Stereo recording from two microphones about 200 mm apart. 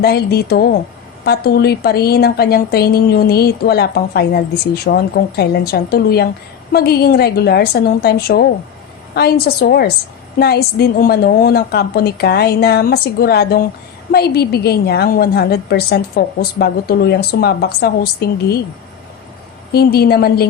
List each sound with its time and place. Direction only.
0.0 s a woman's voice: 50° left (ahead or behind)
19.7 s a woman's voice: 50° left (ahead or behind)